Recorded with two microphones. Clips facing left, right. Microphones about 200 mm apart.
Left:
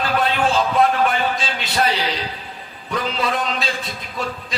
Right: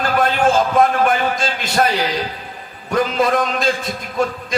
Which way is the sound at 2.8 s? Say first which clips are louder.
Right 6 dB; 45° right (ahead or behind).